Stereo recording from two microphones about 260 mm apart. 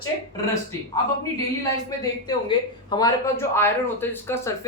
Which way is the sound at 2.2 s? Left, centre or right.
Centre.